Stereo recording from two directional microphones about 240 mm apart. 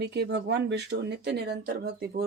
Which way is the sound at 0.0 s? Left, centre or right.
Right.